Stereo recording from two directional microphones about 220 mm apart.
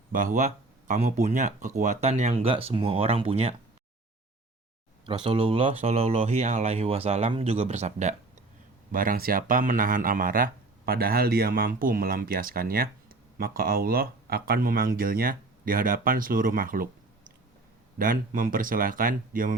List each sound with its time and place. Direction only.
0.1 s speech: 35° right (ahead or behind)
5.0 s speech: 25° right (ahead or behind); by 16.9 s 40° right (ahead or behind)
17.9 s speech: 40° right (ahead or behind)